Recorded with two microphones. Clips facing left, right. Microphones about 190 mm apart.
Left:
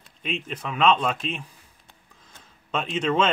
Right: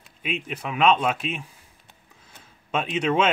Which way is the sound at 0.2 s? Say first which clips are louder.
Right 1 dB; 10° right (ahead or behind).